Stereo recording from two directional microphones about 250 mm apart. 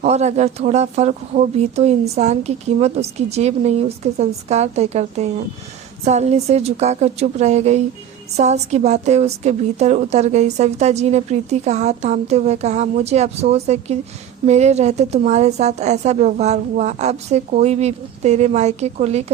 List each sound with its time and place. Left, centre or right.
0.0 s a woman's voice: right